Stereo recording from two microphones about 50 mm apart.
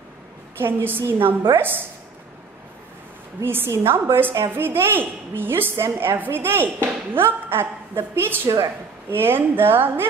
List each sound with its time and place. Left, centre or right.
0.6 s a woman's voice: right
3.4 s a woman's voice: right